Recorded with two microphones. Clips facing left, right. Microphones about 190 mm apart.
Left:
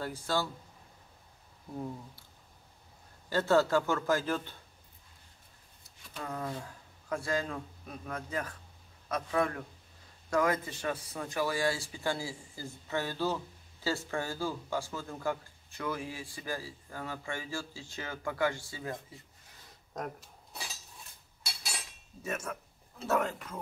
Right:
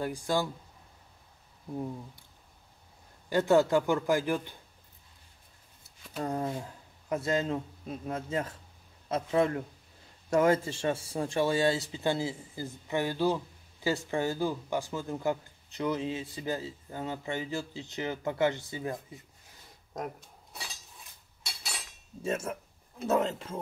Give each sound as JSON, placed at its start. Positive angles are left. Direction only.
{"t": 0.0, "sound": "a man's voice", "side_deg": -15}
{"t": 3.3, "sound": "a man's voice", "side_deg": -15}
{"t": 6.1, "sound": "speech", "side_deg": -35}
{"t": 22.2, "sound": "speech", "side_deg": -25}